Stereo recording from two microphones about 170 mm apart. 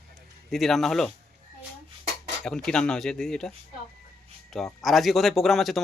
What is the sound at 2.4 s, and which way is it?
Speech, 5° left (ahead or behind).